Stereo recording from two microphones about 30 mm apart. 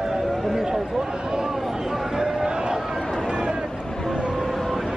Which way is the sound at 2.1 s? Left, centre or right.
Centre.